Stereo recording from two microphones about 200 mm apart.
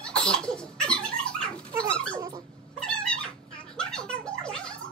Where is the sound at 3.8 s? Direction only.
5° left (ahead or behind).